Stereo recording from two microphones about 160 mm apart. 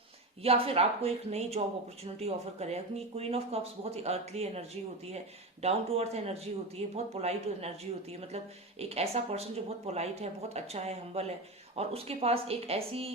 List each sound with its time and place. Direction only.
0.4 s speech: 40° right (ahead or behind)
5.6 s speech: 40° right (ahead or behind)
8.8 s speech: 40° right (ahead or behind)